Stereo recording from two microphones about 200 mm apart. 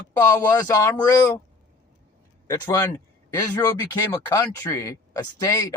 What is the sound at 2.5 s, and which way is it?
Speech, 15° left (ahead or behind).